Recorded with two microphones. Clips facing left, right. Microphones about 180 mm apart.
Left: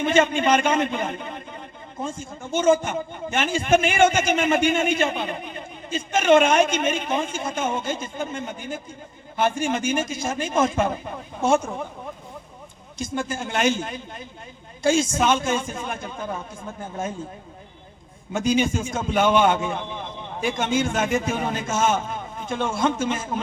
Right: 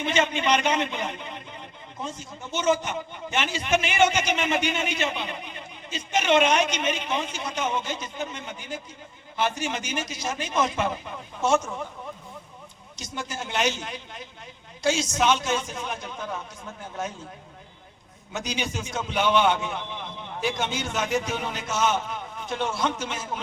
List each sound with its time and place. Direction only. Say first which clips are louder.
0.0 s a man's voice: left 5 dB; 50° left (ahead or behind)
13.0 s a man's voice: left 7 dB; 50° left (ahead or behind)
18.3 s a man's voice: left 9 dB; 50° left (ahead or behind)